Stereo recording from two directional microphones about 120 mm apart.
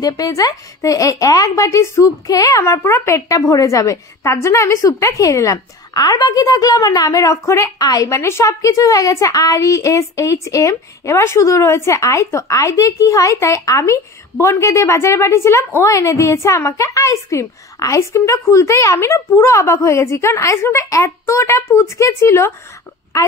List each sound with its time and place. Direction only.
0.0 s speech: 30° left (ahead or behind)